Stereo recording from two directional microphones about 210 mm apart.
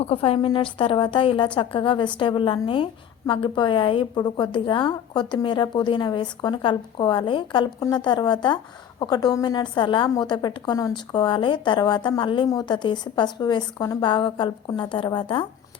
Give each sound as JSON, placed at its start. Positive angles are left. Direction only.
{"t": 0.0, "sound": "a woman's voice", "side_deg": 25}